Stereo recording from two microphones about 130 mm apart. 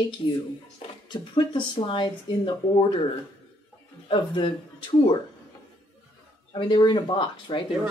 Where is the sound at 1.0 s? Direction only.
35° left (ahead or behind).